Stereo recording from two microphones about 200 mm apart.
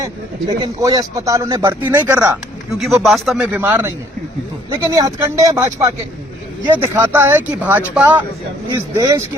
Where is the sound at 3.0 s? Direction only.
Centre (ahead or behind).